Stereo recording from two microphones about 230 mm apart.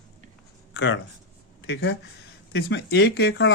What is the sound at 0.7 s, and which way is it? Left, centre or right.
Speech, left.